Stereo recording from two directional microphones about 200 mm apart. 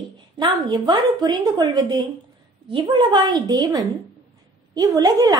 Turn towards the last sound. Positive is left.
turn(degrees=-15)  # may be behind; listen again after turning